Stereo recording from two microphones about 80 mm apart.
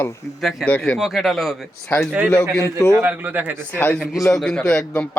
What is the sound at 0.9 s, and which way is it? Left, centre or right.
Speech, centre.